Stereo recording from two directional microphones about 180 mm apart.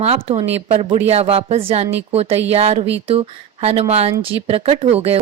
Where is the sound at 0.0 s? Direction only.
35° right (ahead or behind).